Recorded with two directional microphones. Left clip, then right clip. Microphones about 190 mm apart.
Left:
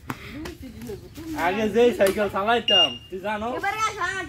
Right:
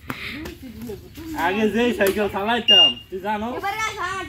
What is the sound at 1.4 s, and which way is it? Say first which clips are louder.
Speech: even; 15° left (ahead or behind).